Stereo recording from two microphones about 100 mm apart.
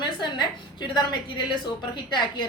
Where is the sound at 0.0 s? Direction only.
50° left (ahead or behind).